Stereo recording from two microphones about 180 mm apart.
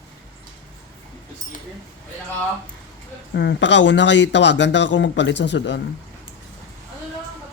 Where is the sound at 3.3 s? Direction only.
70° left (ahead or behind).